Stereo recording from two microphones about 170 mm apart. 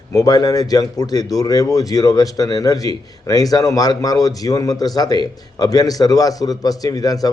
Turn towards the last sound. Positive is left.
turn(degrees=20)  # may be behind; listen again after turning